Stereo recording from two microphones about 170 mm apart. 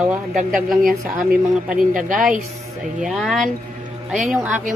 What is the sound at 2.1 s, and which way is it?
A woman's voice, 5° right (ahead or behind).